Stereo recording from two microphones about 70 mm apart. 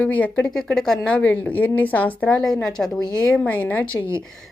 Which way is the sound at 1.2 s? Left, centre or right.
Left.